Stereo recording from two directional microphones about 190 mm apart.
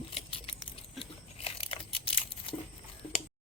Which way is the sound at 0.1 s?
30° left (ahead or behind).